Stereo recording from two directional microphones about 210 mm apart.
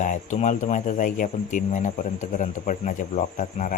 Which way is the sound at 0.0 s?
35° left (ahead or behind).